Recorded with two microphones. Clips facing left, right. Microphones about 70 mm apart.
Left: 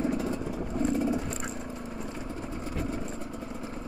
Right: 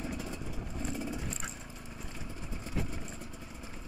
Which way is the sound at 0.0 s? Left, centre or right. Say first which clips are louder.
Left 10 dB; left.